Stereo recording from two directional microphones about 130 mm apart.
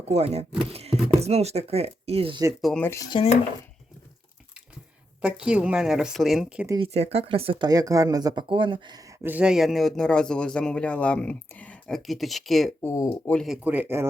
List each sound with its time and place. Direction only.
0.1 s speech: 50° right (ahead or behind)
2.6 s speech: centre (ahead or behind)
2.8 s speech: 20° left (ahead or behind)
3.1 s dishes: 45° left (ahead or behind)
5.2 s speech: 10° right (ahead or behind)
6.7 s speech: 50° right (ahead or behind)
7.7 s speech: 25° right (ahead or behind)
8.4 s speech: 40° right (ahead or behind); by 12.7 s centre (ahead or behind)
12.8 s speech: 25° left (ahead or behind)
13.7 s speech: 15° right (ahead or behind)